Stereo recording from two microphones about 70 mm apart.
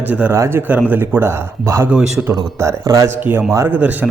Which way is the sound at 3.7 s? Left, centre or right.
Right.